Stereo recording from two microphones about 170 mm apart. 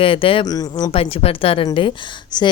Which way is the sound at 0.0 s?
30° left (ahead or behind).